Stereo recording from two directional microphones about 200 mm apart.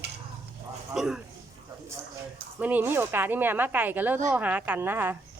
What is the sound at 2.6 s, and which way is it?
Speech, 10° right (ahead or behind).